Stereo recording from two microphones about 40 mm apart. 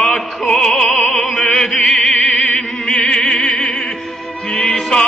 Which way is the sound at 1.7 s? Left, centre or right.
Left.